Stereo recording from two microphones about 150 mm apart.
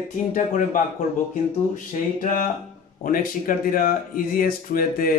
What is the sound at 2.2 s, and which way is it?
Speech, 65° left (ahead or behind).